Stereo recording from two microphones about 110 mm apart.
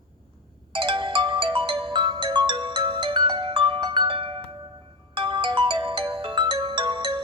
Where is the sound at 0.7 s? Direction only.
50° right (ahead or behind).